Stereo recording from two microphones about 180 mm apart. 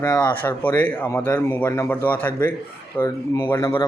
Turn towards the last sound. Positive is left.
turn(degrees=15)  # may be behind; listen again after turning